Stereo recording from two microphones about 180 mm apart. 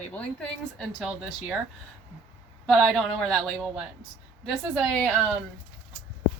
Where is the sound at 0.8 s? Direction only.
5° right (ahead or behind).